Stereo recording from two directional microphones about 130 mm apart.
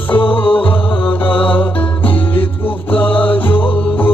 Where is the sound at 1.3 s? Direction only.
10° left (ahead or behind).